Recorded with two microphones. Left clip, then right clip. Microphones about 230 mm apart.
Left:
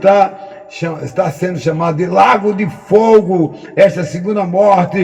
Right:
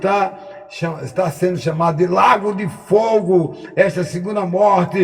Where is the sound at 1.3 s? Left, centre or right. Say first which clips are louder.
Left 2 dB; right.